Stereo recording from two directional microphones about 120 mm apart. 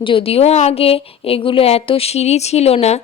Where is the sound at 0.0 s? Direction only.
50° left (ahead or behind).